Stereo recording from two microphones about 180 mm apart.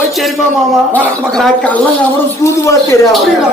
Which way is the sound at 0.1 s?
Centre (ahead or behind).